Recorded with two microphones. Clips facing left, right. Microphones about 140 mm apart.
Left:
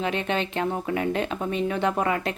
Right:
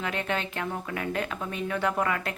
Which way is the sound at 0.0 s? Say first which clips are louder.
Left 4 dB; 20° left (ahead or behind).